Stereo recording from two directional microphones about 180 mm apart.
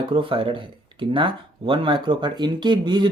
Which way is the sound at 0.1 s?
30° right (ahead or behind).